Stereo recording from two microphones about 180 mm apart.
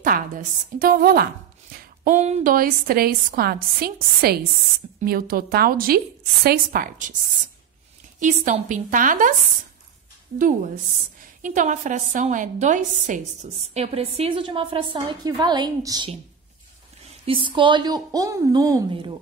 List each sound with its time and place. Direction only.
0.0 s a woman's voice: 50° right (ahead or behind)
1.8 s speech: 45° right (ahead or behind)
2.5 s a woman's voice: 55° right (ahead or behind)
8.2 s a woman's voice: 45° right (ahead or behind)
11.4 s a woman's voice: 45° right (ahead or behind); by 16.1 s 20° right (ahead or behind)
17.3 s a woman's voice: 30° right (ahead or behind)